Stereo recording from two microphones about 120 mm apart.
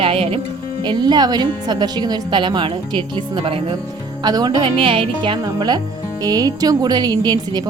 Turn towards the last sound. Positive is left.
turn(degrees=-35)  # may be behind; listen again after turning